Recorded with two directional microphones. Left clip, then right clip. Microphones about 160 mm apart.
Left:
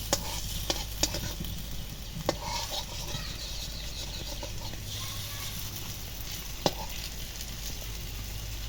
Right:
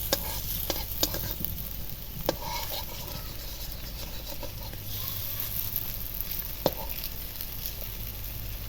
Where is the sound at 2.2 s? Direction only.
25° right (ahead or behind).